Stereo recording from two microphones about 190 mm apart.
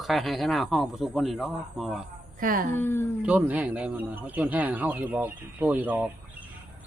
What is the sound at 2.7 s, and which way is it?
Speech, 10° left (ahead or behind).